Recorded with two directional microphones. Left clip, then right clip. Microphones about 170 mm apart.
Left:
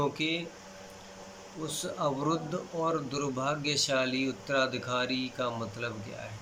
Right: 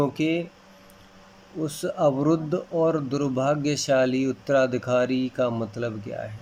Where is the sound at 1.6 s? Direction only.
35° right (ahead or behind).